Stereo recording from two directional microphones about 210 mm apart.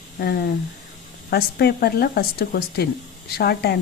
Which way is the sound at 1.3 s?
50° left (ahead or behind).